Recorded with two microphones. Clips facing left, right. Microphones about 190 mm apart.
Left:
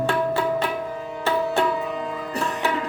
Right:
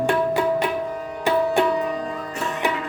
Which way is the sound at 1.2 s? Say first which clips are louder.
Right 3 dB; 15° right (ahead or behind).